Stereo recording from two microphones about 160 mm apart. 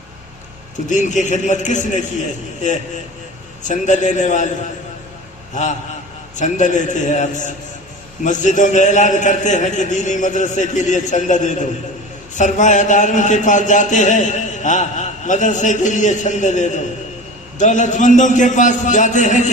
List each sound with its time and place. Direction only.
0.9 s a man's voice: 50° left (ahead or behind)
3.6 s a man's voice: 50° left (ahead or behind)
6.3 s a man's voice: 50° left (ahead or behind)